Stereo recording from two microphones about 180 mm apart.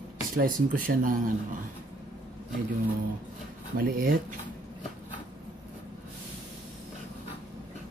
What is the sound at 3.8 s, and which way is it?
Speech, 55° right (ahead or behind).